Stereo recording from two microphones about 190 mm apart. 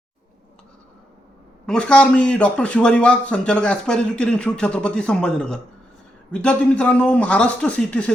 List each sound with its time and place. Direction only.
1.6 s a man's voice: 5° left (ahead or behind)